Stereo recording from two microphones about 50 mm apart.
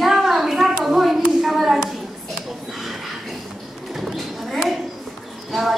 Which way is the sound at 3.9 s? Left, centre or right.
Centre.